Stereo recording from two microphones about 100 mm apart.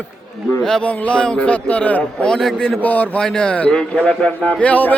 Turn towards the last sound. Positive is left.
turn(degrees=15)  # may be behind; listen again after turning